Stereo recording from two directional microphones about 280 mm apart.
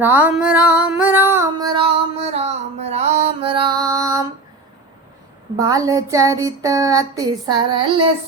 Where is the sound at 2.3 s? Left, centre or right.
Right.